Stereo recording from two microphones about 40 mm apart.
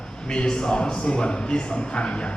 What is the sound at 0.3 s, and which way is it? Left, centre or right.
Speech, left.